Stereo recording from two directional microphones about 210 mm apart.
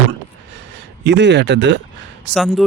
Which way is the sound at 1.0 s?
55° right (ahead or behind).